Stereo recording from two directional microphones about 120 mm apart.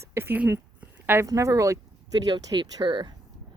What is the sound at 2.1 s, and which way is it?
Speech, 35° right (ahead or behind).